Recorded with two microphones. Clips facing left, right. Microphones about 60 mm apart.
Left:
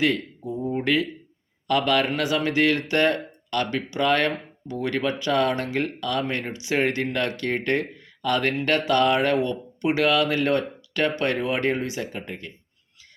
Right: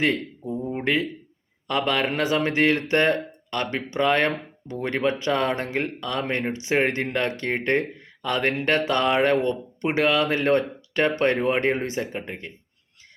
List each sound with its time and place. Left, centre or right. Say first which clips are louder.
0.0 s speech: even; right